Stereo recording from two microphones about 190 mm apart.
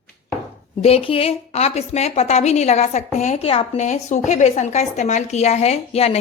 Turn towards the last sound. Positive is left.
turn(degrees=35)  # may be behind; listen again after turning